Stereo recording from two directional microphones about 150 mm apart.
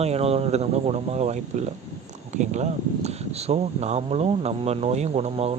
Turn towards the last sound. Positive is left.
turn(degrees=-45)  # may be behind; listen again after turning